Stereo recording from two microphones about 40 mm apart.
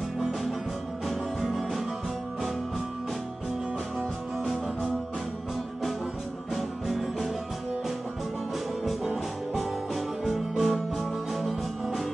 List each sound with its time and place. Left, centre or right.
0.2 s music: centre
6.5 s music: centre
8.8 s music: centre